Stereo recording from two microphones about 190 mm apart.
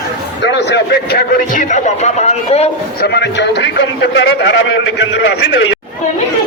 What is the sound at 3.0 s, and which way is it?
A man's voice, 60° left (ahead or behind).